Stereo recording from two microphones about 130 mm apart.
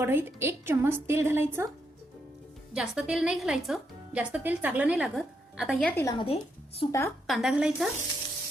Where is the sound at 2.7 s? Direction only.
5° right (ahead or behind).